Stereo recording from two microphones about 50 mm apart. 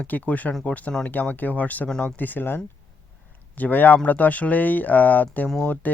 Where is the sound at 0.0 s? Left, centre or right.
Left.